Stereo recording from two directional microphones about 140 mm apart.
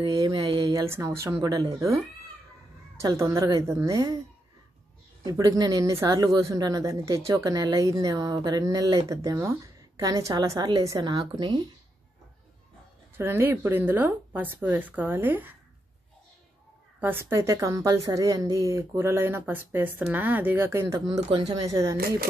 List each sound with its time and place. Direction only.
0.0 s a sound: 30° right (ahead or behind)
0.7 s speech: 20° right (ahead or behind)
3.0 s speech: 20° right (ahead or behind)
5.2 s speech: 25° right (ahead or behind)
13.2 s a woman's voice: 15° right (ahead or behind)
17.0 s a woman's voice: 15° right (ahead or behind)
21.3 s speech: 35° right (ahead or behind)
21.6 s speech: 20° right (ahead or behind)